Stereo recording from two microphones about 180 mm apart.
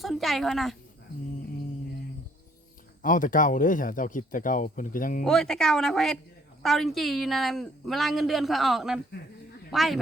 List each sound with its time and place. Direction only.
0.0 s speech: centre (ahead or behind)
3.0 s speech: 45° left (ahead or behind)
5.2 s speech: 5° left (ahead or behind)